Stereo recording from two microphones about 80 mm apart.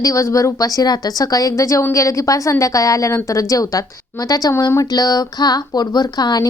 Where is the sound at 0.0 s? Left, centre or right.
Left.